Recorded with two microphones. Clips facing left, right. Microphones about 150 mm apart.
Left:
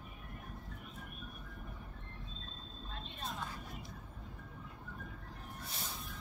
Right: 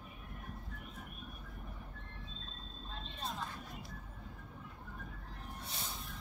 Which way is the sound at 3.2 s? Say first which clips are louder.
Right 1 dB; centre (ahead or behind).